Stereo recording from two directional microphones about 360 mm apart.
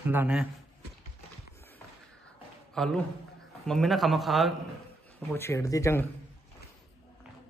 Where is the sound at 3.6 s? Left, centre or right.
Centre.